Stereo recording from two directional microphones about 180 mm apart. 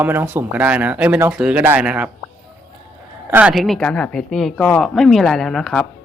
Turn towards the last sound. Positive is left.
turn(degrees=5)  # may be behind; listen again after turning